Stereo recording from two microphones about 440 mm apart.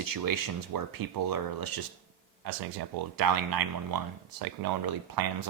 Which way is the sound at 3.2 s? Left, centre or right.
Right.